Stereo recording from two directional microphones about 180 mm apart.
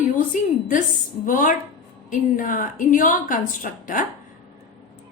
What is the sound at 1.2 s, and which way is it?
A woman's voice, 45° left (ahead or behind).